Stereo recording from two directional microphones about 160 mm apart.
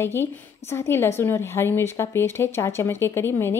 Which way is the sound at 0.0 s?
15° left (ahead or behind).